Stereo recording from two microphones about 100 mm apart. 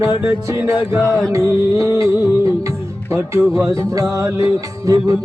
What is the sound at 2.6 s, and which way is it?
Music, 30° right (ahead or behind).